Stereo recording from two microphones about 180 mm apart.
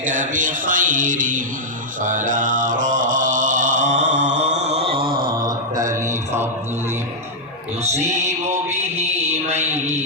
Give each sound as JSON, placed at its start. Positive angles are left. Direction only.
{"t": 0.1, "sound": "speech", "side_deg": -45}
{"t": 2.0, "sound": "mantra", "side_deg": -45}
{"t": 4.1, "sound": "mantra", "side_deg": -80}
{"t": 4.4, "sound": "mantra", "side_deg": -40}
{"t": 5.0, "sound": "a sound", "side_deg": -50}
{"t": 5.5, "sound": "mantra", "side_deg": -20}
{"t": 8.2, "sound": "music", "side_deg": -40}